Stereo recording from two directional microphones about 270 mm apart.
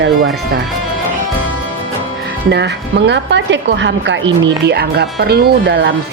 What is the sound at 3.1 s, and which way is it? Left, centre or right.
A woman's voice, right.